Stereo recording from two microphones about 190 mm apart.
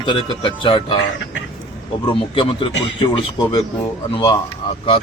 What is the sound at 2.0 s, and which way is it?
A man's voice, 25° left (ahead or behind).